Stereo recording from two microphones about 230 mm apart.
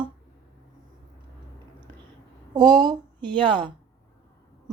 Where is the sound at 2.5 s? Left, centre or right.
Centre.